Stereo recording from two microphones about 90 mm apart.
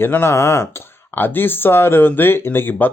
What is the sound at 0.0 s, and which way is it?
Speech, 25° left (ahead or behind).